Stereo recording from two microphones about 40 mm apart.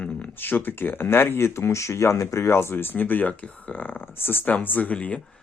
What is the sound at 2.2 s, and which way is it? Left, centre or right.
Speech, left.